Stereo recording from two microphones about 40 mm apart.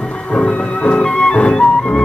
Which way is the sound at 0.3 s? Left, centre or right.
Left.